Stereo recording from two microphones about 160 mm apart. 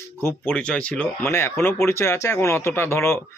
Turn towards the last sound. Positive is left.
turn(degrees=15)  # may be behind; listen again after turning